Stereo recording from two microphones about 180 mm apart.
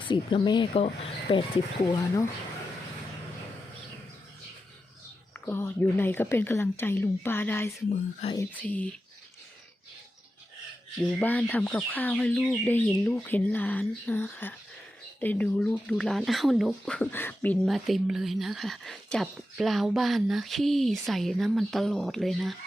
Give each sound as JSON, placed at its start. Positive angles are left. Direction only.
{"t": 0.0, "sound": "speech", "side_deg": 25}
{"t": 5.5, "sound": "speech", "side_deg": 15}
{"t": 7.9, "sound": "speech", "side_deg": 40}
{"t": 8.5, "sound": "speech", "side_deg": 10}
{"t": 11.0, "sound": "speech", "side_deg": 10}
{"t": 17.7, "sound": "speech", "side_deg": 0}